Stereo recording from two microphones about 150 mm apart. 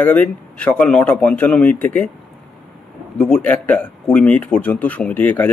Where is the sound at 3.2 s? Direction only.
5° left (ahead or behind).